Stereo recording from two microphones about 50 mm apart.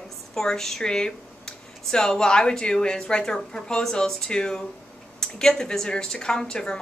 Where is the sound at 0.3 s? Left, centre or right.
Centre.